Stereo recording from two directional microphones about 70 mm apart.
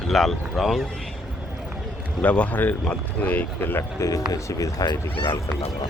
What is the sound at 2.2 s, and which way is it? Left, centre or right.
Speech, centre.